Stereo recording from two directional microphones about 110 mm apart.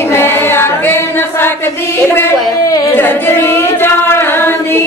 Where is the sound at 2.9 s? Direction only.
20° left (ahead or behind).